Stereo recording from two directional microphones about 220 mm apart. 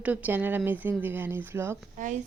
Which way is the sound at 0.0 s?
5° right (ahead or behind).